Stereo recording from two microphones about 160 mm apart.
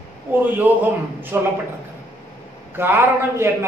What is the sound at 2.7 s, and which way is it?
Speech, 15° right (ahead or behind).